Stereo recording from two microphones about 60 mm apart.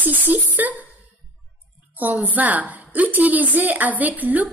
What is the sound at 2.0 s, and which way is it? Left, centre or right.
A woman's voice, right.